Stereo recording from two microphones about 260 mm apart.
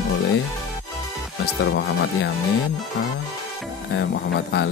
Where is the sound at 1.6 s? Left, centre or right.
Left.